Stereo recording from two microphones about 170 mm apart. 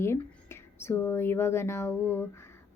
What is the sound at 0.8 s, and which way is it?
Speech, 15° left (ahead or behind).